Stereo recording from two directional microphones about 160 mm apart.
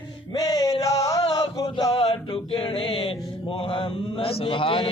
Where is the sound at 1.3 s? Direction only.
25° left (ahead or behind).